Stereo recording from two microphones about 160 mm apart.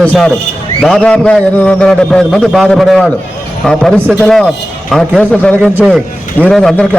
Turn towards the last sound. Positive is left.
turn(degrees=5)  # may be behind; listen again after turning